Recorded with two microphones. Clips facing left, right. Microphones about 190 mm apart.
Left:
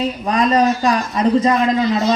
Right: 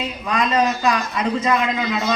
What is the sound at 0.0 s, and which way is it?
A woman's voice, 35° left (ahead or behind).